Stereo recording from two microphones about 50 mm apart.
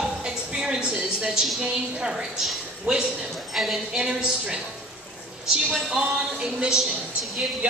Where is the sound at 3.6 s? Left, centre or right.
Centre.